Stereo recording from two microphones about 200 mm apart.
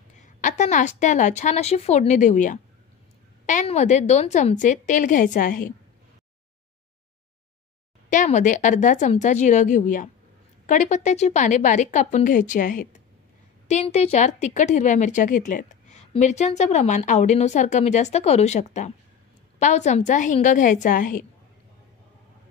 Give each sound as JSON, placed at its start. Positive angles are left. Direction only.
{"t": 0.2, "sound": "speech", "side_deg": 35}
{"t": 8.1, "sound": "speech", "side_deg": 40}